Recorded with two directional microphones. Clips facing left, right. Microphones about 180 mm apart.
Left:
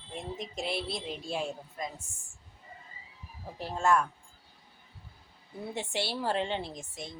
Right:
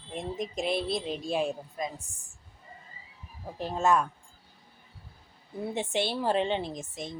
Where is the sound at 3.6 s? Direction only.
20° right (ahead or behind).